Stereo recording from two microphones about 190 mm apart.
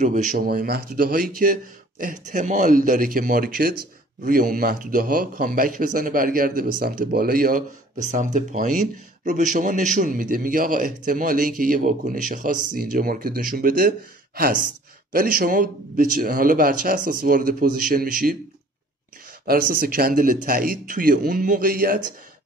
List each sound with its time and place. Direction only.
0.0 s a man's voice: 40° right (ahead or behind)
19.4 s a man's voice: 50° right (ahead or behind)